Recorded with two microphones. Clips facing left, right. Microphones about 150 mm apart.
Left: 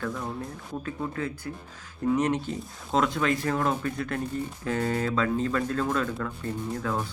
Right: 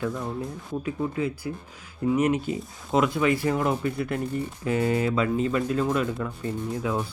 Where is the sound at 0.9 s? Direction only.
15° right (ahead or behind).